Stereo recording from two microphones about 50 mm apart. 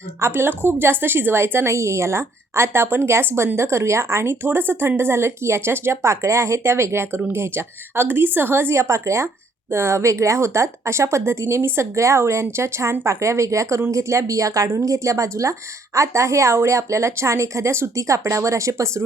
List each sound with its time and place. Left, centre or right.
0.2 s a woman's voice: right
4.4 s a woman's voice: right
7.5 s a woman's voice: right